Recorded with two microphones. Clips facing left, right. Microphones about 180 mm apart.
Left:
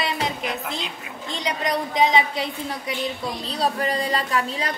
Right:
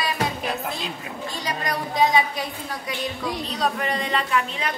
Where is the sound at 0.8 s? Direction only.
20° left (ahead or behind).